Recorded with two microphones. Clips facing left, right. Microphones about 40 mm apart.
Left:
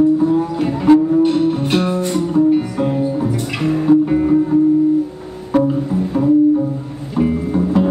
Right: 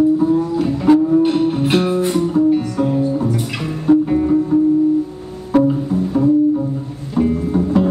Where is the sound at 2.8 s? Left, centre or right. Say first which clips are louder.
Right 1 dB; centre.